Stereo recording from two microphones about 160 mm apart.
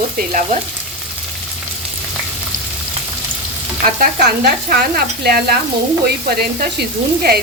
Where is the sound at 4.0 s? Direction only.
70° right (ahead or behind).